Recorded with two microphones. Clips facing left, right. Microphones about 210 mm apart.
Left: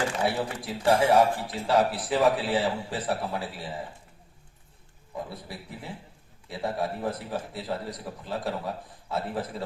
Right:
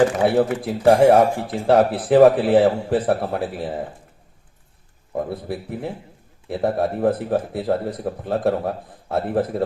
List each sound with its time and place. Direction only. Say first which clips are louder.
0.2 s a man's voice: right 10 dB; 55° right (ahead or behind)
5.1 s a man's voice: right 11 dB; 55° right (ahead or behind)